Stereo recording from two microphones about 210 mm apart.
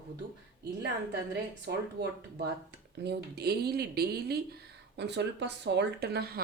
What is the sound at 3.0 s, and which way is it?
Speech, 50° right (ahead or behind).